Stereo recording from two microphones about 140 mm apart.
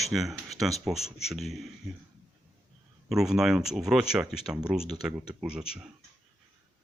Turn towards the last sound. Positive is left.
turn(degrees=-5)  # may be behind; listen again after turning